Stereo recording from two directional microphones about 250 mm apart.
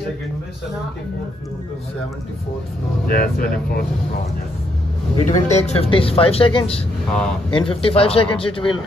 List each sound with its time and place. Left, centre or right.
3.1 s speech: left
5.1 s speech: left